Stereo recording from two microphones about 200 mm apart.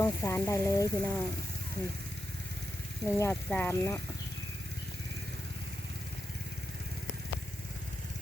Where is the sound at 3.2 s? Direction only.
10° left (ahead or behind).